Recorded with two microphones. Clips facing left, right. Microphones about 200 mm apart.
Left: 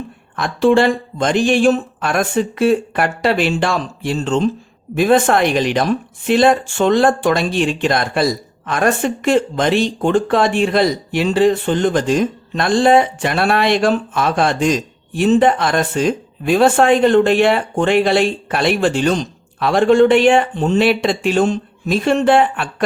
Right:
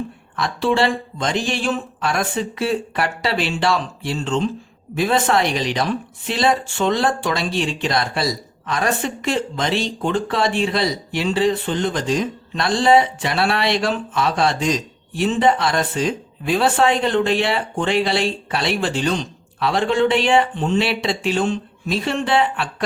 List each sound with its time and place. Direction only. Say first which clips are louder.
0.3 s speech: left 6 dB; 50° left (ahead or behind)